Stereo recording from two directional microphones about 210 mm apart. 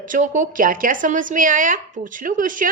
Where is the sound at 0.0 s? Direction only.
40° right (ahead or behind).